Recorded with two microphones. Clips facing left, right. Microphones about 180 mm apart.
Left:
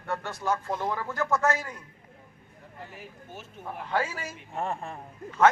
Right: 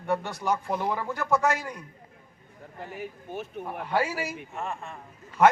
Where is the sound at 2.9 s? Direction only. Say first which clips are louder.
Right 8 dB; 60° right (ahead or behind).